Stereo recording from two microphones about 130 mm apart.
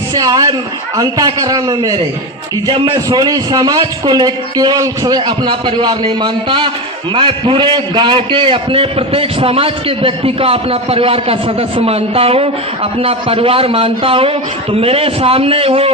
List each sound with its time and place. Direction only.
0.1 s a man's voice: 30° right (ahead or behind); by 15.9 s 50° right (ahead or behind)